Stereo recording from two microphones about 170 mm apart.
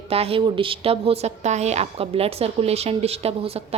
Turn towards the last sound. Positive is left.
turn(degrees=-35)  # may be behind; listen again after turning